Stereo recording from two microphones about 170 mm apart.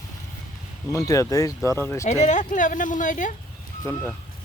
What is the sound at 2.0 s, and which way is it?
Speech, 45° left (ahead or behind).